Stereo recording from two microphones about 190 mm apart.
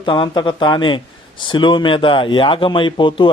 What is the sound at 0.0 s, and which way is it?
A man's voice, 25° left (ahead or behind).